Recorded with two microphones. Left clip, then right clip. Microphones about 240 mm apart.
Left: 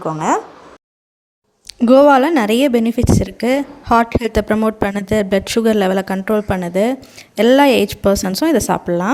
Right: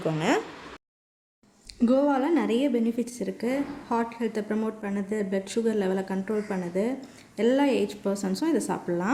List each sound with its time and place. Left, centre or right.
1.6 s speech: left